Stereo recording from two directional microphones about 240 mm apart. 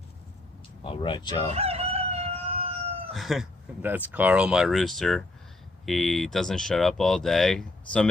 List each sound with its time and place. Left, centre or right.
0.9 s speech: centre
1.5 s crowing: right
3.2 s speech: centre